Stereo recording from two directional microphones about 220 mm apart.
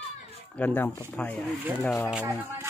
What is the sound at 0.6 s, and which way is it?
Speech, 10° left (ahead or behind).